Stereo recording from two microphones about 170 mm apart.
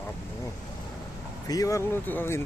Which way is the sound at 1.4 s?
20° left (ahead or behind).